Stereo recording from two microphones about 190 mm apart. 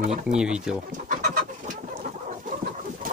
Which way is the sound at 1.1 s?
40° right (ahead or behind).